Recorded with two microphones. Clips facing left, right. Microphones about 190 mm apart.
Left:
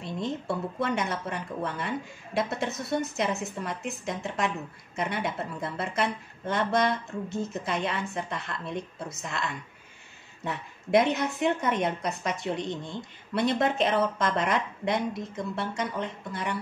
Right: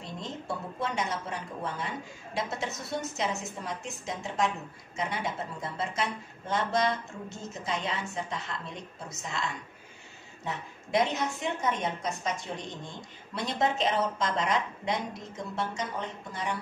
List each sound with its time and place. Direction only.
0.0 s a woman's voice: 60° left (ahead or behind)
10.4 s a woman's voice: 60° left (ahead or behind)